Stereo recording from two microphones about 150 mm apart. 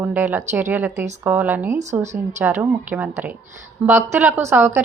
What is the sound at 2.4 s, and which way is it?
A woman's voice, 15° right (ahead or behind).